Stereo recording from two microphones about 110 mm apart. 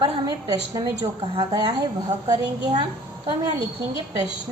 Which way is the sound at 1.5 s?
35° right (ahead or behind).